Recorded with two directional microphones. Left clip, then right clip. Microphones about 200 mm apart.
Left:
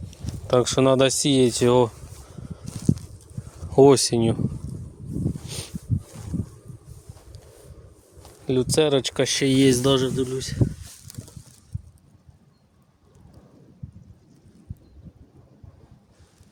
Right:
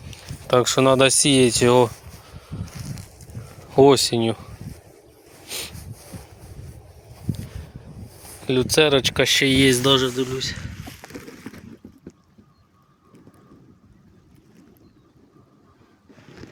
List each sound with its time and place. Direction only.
0.1 s speech: 10° left (ahead or behind)
3.7 s speech: 20° left (ahead or behind)
5.5 s a sound: 10° left (ahead or behind)
8.4 s speech: 10° left (ahead or behind)